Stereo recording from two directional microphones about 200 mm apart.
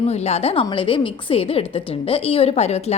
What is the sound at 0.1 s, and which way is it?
A woman's voice, 30° left (ahead or behind).